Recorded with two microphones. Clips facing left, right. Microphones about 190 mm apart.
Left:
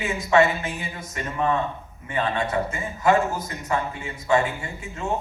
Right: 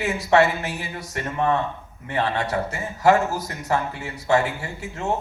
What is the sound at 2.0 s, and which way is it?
A man's voice, 70° right (ahead or behind).